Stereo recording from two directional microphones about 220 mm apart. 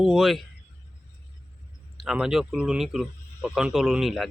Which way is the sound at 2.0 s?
5° right (ahead or behind).